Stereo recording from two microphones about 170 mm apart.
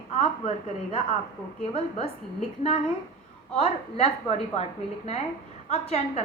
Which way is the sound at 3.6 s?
40° left (ahead or behind).